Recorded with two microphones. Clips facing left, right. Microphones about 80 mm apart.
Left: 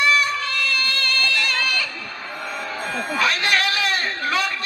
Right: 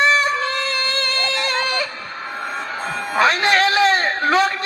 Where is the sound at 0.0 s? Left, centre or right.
Right.